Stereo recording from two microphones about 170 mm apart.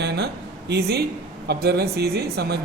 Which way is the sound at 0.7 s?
70° right (ahead or behind).